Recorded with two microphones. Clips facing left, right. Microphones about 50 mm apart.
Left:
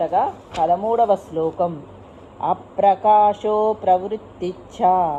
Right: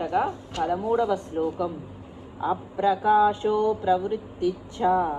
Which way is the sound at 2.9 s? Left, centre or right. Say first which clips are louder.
Left 6 dB; left.